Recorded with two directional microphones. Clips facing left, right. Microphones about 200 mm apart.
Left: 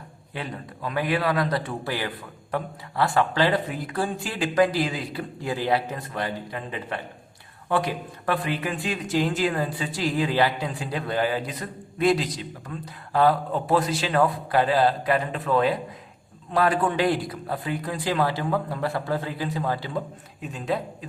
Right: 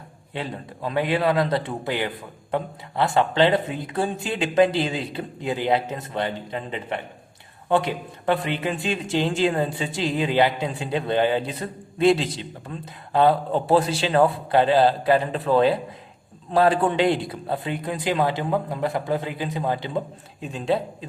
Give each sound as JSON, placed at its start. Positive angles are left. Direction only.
{"t": 0.3, "sound": "a man's voice", "side_deg": -25}